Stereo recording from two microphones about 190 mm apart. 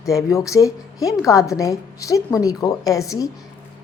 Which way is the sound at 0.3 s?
15° left (ahead or behind).